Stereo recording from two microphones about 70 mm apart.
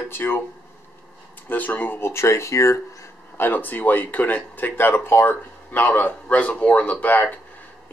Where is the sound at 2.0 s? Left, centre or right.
Left.